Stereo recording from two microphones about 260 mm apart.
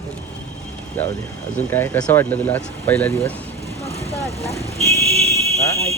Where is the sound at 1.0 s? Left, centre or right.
Centre.